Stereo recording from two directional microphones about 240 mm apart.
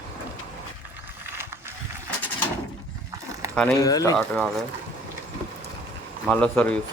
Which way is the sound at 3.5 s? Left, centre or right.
Centre.